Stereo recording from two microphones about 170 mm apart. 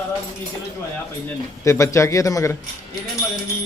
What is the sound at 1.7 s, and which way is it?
Speech, 15° left (ahead or behind).